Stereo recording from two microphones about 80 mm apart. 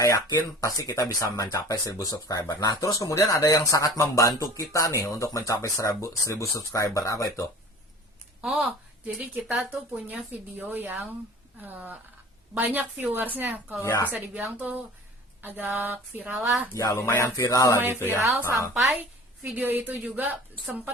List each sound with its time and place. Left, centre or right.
0.0 s speech: left
1.6 s speech: left
2.8 s speech: left
8.4 s speech: centre
8.6 s a woman's voice: centre
16.3 s speech: centre
16.7 s speech: left
17.7 s a woman's voice: right